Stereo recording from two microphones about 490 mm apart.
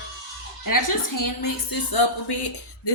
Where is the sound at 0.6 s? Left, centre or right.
Left.